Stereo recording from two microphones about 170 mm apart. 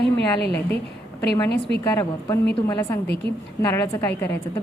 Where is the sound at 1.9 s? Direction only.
20° left (ahead or behind).